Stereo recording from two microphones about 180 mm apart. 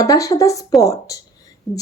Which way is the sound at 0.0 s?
20° left (ahead or behind).